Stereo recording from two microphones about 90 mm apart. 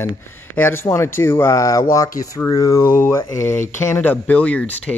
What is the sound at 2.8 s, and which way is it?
Speech, 25° left (ahead or behind).